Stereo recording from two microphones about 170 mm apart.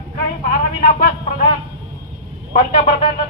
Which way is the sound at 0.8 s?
60° left (ahead or behind).